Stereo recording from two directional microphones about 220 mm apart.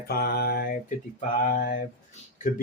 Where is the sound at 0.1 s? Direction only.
45° left (ahead or behind).